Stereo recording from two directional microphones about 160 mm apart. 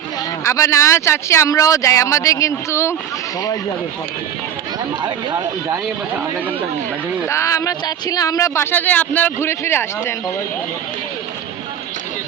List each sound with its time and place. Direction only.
0.4 s speech: 20° left (ahead or behind)
7.3 s speech: 20° left (ahead or behind)